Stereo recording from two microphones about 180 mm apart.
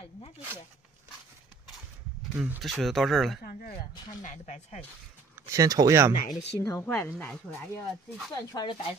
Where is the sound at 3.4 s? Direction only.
55° left (ahead or behind).